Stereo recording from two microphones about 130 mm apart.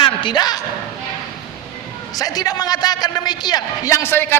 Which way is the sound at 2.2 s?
30° left (ahead or behind).